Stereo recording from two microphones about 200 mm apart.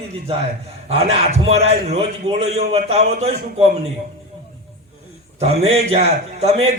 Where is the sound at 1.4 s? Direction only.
30° right (ahead or behind).